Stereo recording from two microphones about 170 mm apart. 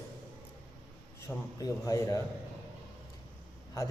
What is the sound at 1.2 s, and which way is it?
Speech, 20° left (ahead or behind).